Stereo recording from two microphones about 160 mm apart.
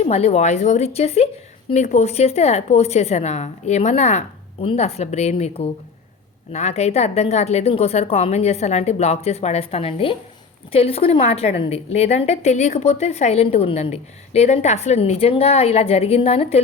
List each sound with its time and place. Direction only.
0.0 s a woman's voice: 40° left (ahead or behind)